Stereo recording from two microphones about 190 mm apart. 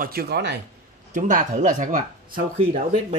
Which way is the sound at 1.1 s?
40° right (ahead or behind).